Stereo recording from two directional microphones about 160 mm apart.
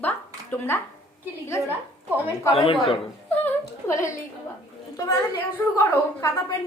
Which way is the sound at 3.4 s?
15° left (ahead or behind).